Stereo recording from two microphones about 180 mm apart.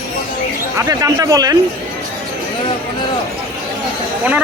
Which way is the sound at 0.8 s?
20° right (ahead or behind).